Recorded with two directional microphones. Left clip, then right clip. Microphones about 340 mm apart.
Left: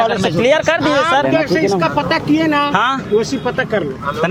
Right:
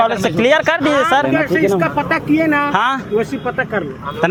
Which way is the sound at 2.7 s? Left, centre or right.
Right.